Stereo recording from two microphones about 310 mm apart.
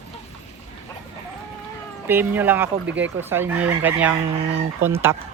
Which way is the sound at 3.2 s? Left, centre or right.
Centre.